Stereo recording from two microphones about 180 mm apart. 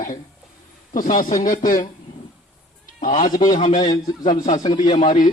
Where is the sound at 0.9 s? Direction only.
50° left (ahead or behind).